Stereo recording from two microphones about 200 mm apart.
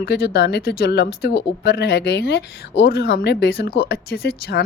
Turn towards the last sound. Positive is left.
turn(degrees=55)  # may be behind; listen again after turning